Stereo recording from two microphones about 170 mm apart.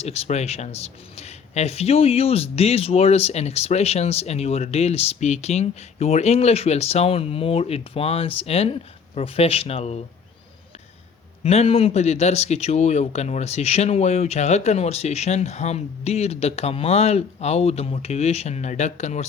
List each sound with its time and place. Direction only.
0.0 s speech: 40° left (ahead or behind)
11.4 s speech: 40° left (ahead or behind)